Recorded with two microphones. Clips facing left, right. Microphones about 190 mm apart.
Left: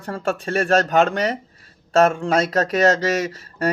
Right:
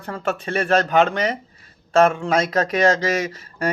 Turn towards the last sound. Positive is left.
turn(degrees=35)  # may be behind; listen again after turning